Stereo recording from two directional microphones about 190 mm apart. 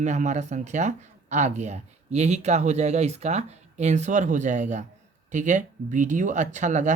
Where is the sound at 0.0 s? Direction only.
40° right (ahead or behind).